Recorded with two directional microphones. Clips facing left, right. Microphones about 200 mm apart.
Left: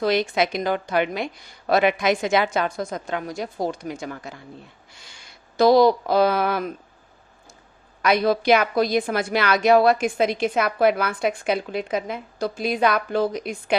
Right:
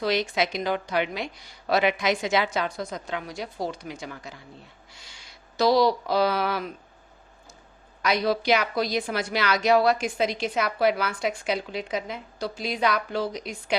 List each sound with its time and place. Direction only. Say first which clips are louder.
0.0 s a woman's voice: left 4 dB; 50° left (ahead or behind)
8.0 s a woman's voice: left 5 dB; 55° left (ahead or behind)